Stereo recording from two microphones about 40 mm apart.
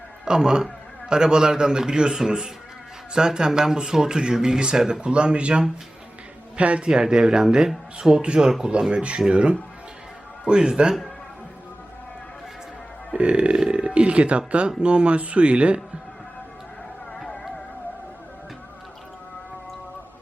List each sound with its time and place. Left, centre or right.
0.3 s speech: centre
6.9 s speech: centre
13.1 s speech: right